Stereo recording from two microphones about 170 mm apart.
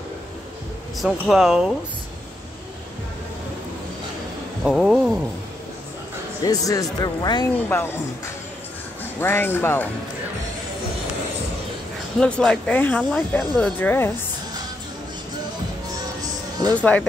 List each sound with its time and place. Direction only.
1.2 s speech: centre (ahead or behind)
4.6 s speech: centre (ahead or behind)
6.4 s speech: 20° left (ahead or behind)
9.2 s speech: 15° left (ahead or behind)
12.2 s speech: 5° left (ahead or behind)
16.2 s music: 25° right (ahead or behind)
16.7 s speech: 10° left (ahead or behind)